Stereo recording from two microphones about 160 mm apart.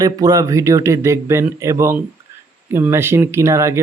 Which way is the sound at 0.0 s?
20° right (ahead or behind).